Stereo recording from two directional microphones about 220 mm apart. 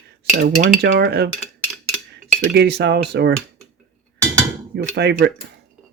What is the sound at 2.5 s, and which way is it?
Speech, 50° right (ahead or behind).